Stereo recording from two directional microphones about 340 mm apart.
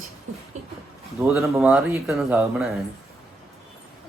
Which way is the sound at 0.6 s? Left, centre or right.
Centre.